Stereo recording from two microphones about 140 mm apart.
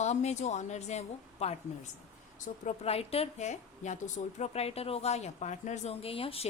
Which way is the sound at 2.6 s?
45° left (ahead or behind).